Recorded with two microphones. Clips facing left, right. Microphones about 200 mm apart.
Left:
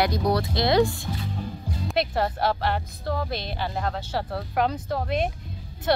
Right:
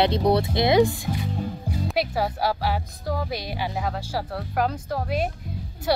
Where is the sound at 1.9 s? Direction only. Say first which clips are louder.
Left 1 dB; 5° right (ahead or behind).